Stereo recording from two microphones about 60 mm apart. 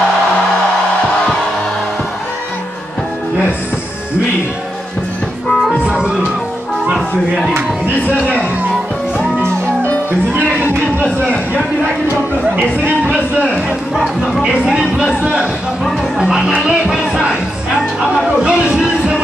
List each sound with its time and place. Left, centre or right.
5.9 s music: centre
13.4 s speech: centre
13.9 s speech: centre
14.7 s music: centre
18.2 s speech: centre